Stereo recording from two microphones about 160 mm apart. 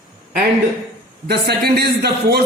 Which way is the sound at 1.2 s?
90° right.